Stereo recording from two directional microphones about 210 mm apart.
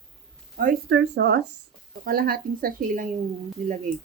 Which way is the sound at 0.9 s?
55° right (ahead or behind).